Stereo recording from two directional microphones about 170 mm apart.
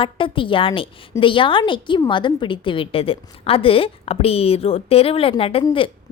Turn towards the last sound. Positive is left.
turn(degrees=30)  # may be behind; listen again after turning